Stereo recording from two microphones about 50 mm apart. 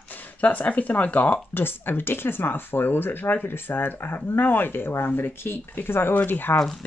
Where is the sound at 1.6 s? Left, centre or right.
Left.